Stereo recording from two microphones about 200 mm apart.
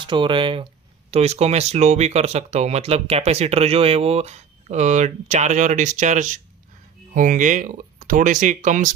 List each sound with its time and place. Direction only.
0.0 s speech: 25° right (ahead or behind); by 8.9 s 40° right (ahead or behind)